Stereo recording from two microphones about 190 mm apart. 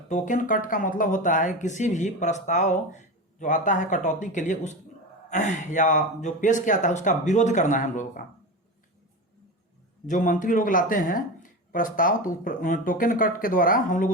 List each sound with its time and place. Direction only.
0.1 s speech: 40° left (ahead or behind)
10.1 s speech: 40° left (ahead or behind)